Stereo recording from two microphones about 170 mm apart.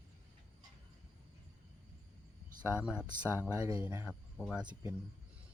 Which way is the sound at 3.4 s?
10° right (ahead or behind).